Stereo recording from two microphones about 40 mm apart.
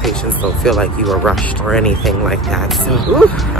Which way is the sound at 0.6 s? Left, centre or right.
Centre.